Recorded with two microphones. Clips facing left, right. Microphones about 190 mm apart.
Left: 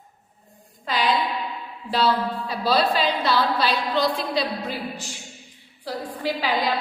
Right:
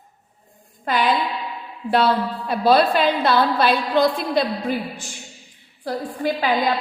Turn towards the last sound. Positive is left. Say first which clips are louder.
# right 4 dB
turn(degrees=-50)  # may be behind; listen again after turning